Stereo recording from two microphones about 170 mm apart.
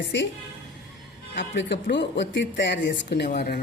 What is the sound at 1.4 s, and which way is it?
Speech, 90° left.